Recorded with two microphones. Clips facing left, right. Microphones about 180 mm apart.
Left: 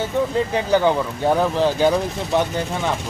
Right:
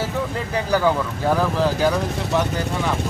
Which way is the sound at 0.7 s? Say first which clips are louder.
Even; 25° left (ahead or behind).